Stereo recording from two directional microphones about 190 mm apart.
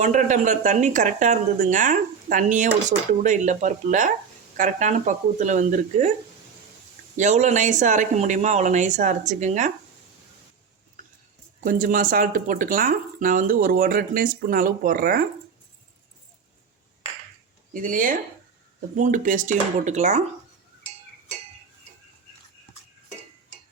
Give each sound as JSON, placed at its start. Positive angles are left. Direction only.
{"t": 0.0, "sound": "speech", "side_deg": -40}
{"t": 7.2, "sound": "speech", "side_deg": -40}
{"t": 11.6, "sound": "speech", "side_deg": -45}
{"t": 17.7, "sound": "speech", "side_deg": -45}